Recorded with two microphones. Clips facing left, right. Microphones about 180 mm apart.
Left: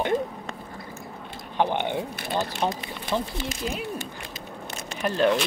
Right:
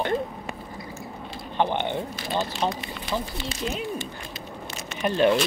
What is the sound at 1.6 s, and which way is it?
Speech, 10° left (ahead or behind).